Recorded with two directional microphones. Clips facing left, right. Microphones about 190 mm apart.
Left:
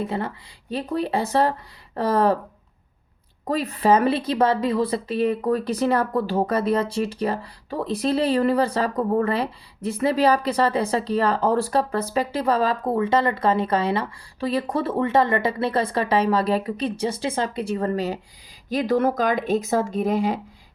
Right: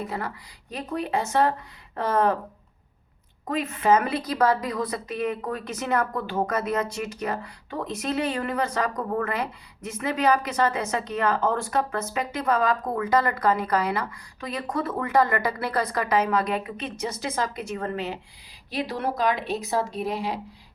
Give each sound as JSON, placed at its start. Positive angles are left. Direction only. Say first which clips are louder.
{"t": 0.0, "sound": "speech", "louder": "left 5 dB", "side_deg": 25}
{"t": 3.4, "sound": "speech", "louder": "left 3 dB", "side_deg": 35}